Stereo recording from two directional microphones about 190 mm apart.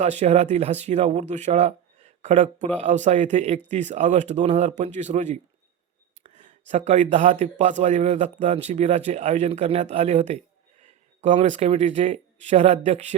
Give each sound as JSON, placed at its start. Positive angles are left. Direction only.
{"t": 0.0, "sound": "speech", "side_deg": -35}